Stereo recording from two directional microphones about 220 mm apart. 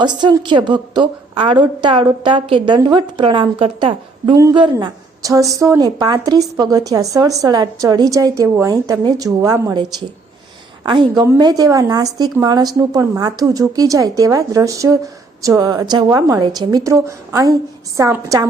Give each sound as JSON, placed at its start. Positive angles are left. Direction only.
{"t": 0.0, "sound": "a woman's voice", "side_deg": -20}
{"t": 10.8, "sound": "a woman's voice", "side_deg": -20}